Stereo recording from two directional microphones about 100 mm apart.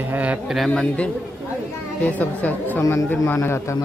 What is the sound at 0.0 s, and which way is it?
Speech, 15° right (ahead or behind).